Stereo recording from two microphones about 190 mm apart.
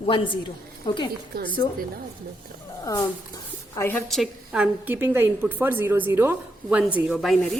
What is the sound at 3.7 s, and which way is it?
Speech, 15° left (ahead or behind).